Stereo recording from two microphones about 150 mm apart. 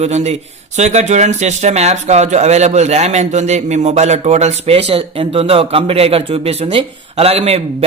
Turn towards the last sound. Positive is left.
turn(degrees=-45)  # may be behind; listen again after turning